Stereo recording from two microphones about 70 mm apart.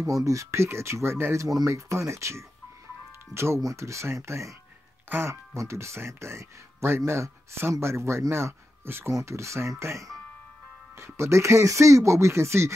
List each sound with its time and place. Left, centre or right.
0.0 s speech: right
1.4 s speech: right